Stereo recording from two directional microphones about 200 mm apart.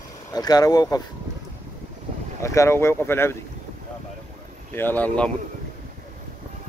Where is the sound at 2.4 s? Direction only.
15° left (ahead or behind).